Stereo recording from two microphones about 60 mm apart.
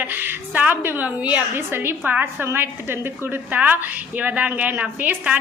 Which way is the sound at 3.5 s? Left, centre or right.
Right.